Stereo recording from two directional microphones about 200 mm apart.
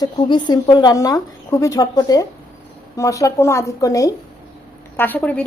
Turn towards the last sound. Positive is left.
turn(degrees=10)  # may be behind; listen again after turning